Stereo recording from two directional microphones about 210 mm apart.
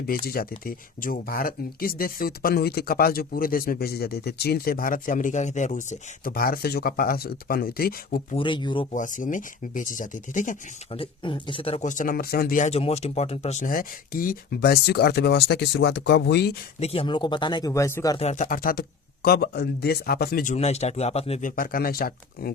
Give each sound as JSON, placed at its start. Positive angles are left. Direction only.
{"t": 0.3, "sound": "speech", "side_deg": 45}
{"t": 8.4, "sound": "speech", "side_deg": 20}
{"t": 8.9, "sound": "speech", "side_deg": 35}
{"t": 11.0, "sound": "speech", "side_deg": 25}
{"t": 16.8, "sound": "speech", "side_deg": 25}
{"t": 18.2, "sound": "speech", "side_deg": 35}
{"t": 21.5, "sound": "speech", "side_deg": 45}